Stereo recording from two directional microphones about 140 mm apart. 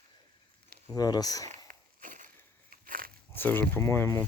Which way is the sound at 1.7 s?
70° right (ahead or behind).